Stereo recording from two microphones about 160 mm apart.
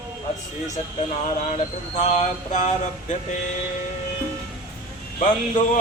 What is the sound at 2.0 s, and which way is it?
Speech, 50° left (ahead or behind).